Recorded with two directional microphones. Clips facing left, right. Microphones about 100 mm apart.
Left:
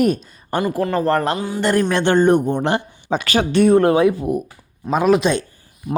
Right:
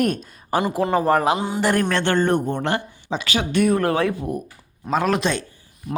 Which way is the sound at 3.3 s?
30° left (ahead or behind).